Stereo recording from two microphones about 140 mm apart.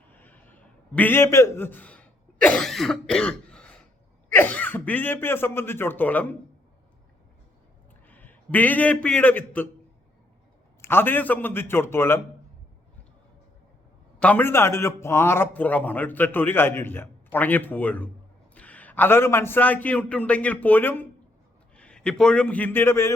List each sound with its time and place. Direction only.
0.1 s a sound: 15° left (ahead or behind)
0.9 s a man's voice: 15° left (ahead or behind)
8.0 s a man's voice: 10° left (ahead or behind)
10.8 s a man's voice: 15° left (ahead or behind)
14.2 s a man's voice: 10° left (ahead or behind)